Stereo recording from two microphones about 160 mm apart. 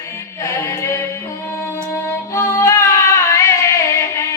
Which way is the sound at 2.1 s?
15° left (ahead or behind).